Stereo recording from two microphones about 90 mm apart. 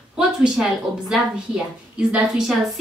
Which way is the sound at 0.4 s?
5° right (ahead or behind).